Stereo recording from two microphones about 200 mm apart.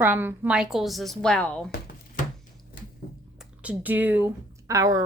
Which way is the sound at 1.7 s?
45° left (ahead or behind).